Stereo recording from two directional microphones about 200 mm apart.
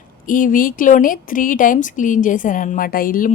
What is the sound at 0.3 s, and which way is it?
A woman's voice, 40° left (ahead or behind).